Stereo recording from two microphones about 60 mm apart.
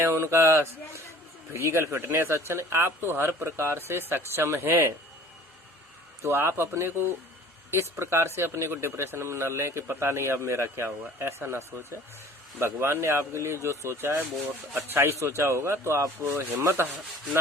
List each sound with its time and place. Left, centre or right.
0.0 s speech: right
6.2 s speech: right